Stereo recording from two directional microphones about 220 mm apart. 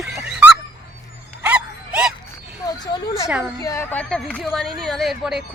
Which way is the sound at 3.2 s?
5° right (ahead or behind).